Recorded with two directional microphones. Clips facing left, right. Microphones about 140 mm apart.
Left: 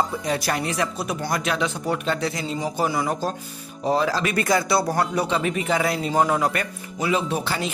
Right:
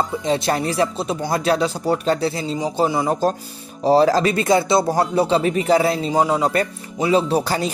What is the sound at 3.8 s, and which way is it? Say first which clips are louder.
Speech: right 7 dB; 40° right (ahead or behind).